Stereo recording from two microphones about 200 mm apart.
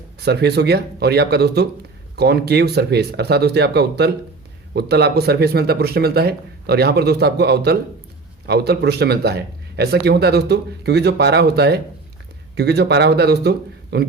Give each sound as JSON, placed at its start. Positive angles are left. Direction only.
{"t": 0.2, "sound": "speech", "side_deg": -55}